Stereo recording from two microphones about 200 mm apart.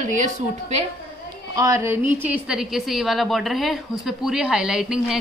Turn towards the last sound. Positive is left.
turn(degrees=-5)  # may be behind; listen again after turning